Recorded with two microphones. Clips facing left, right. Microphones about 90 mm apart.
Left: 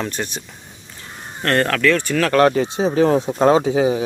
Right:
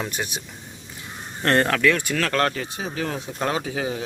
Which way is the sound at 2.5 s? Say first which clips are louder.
Left 11 dB; 25° left (ahead or behind).